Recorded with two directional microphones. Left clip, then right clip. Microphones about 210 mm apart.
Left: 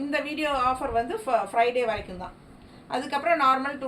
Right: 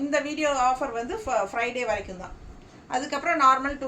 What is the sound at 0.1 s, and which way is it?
A woman's voice, 15° right (ahead or behind).